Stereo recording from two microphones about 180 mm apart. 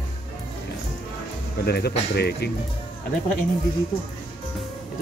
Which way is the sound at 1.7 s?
65° left (ahead or behind).